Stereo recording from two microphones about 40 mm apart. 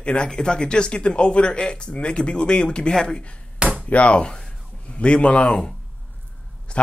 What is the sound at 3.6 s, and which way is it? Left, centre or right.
Chop, right.